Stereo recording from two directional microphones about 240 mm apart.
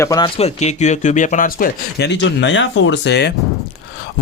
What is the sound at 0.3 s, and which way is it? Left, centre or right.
Speech, left.